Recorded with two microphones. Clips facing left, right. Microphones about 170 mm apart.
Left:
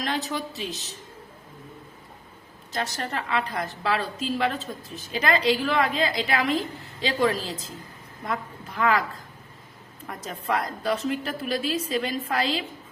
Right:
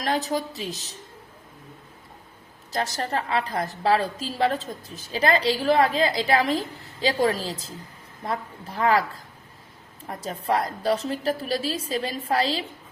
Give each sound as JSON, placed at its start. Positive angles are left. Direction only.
{"t": 0.0, "sound": "a woman's voice", "side_deg": -40}
{"t": 2.7, "sound": "a woman's voice", "side_deg": -35}
{"t": 10.1, "sound": "a woman's voice", "side_deg": -35}